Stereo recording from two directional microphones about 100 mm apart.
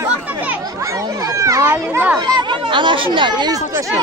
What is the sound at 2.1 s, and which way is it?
Speech, 45° right (ahead or behind).